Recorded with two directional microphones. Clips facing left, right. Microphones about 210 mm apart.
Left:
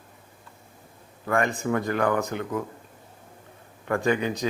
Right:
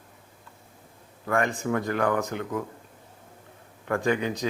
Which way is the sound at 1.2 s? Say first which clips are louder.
Left 1 dB; 15° left (ahead or behind).